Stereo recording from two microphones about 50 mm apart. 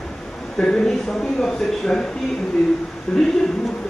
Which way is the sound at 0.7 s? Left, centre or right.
Centre.